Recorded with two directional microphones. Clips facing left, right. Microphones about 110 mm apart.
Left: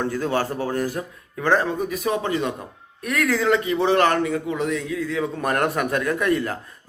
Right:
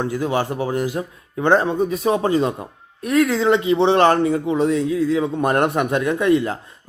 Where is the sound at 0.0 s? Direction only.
15° right (ahead or behind).